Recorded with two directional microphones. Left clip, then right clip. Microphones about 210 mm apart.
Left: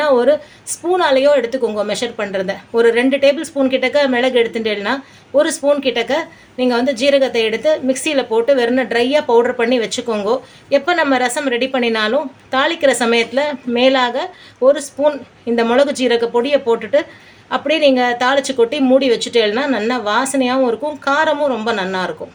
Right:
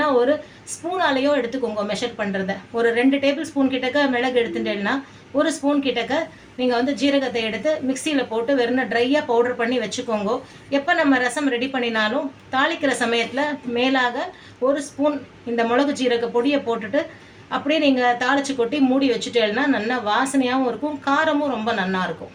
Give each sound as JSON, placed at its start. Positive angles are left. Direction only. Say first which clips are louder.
{"t": 0.9, "sound": "a woman's voice", "louder": "left 7 dB", "side_deg": 50}
{"t": 15.5, "sound": "a woman's voice", "louder": "left 6 dB", "side_deg": 50}